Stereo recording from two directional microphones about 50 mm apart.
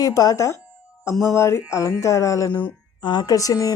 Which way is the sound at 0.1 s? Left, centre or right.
Left.